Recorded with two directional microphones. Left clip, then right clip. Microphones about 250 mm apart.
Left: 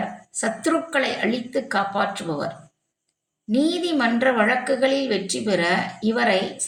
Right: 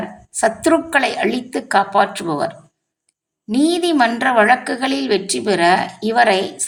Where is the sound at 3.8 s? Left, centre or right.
Right.